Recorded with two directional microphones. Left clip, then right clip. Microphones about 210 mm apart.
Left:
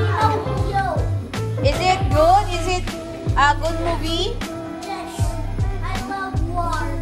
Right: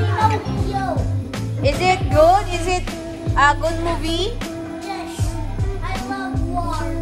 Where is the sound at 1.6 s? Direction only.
20° left (ahead or behind).